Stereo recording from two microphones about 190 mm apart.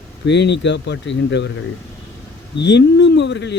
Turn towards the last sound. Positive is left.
turn(degrees=65)  # may be behind; listen again after turning